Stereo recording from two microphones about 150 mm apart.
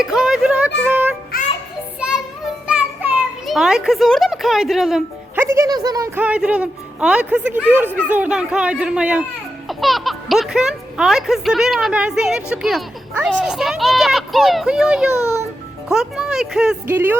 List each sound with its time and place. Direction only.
0.0 s music: centre (ahead or behind)
1.3 s music: 80° left
2.0 s child singing: 5° right (ahead or behind)
2.6 s children playing: 10° right (ahead or behind)
5.4 s speech: 20° right (ahead or behind)